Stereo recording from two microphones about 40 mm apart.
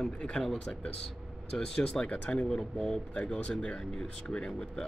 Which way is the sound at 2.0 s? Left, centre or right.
Left.